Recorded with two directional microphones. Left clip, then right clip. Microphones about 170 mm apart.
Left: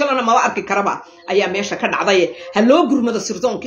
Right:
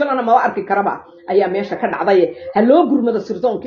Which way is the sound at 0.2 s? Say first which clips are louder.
Right 1 dB; 15° left (ahead or behind).